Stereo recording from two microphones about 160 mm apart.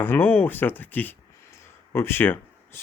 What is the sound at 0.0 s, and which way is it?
Speech, 15° left (ahead or behind).